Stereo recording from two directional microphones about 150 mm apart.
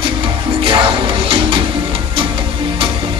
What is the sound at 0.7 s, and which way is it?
Music, 35° right (ahead or behind).